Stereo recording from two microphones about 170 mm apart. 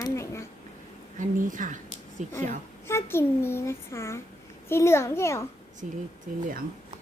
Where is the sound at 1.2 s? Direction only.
50° right (ahead or behind).